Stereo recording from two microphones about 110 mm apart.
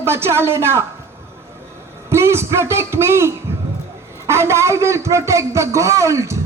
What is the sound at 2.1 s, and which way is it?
A man's voice, 25° right (ahead or behind).